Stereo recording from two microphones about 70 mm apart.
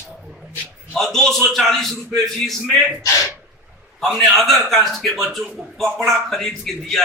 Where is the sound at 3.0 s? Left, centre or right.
Left.